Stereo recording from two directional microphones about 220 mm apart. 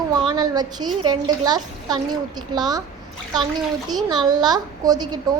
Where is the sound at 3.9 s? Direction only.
20° right (ahead or behind).